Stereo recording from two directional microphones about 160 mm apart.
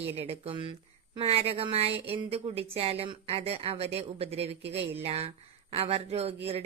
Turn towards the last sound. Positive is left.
turn(degrees=-40)  # may be behind; listen again after turning